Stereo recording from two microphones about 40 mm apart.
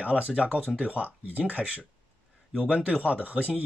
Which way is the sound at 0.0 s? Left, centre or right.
Right.